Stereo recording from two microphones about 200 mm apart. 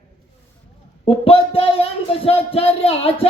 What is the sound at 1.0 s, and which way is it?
Speech, 30° left (ahead or behind).